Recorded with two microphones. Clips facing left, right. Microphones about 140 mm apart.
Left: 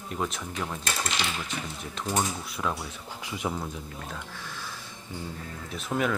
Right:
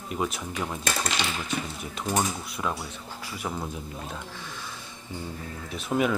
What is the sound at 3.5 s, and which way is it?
Speech, 5° right (ahead or behind).